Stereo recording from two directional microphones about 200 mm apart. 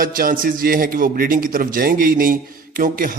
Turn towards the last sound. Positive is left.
turn(degrees=-45)  # may be behind; listen again after turning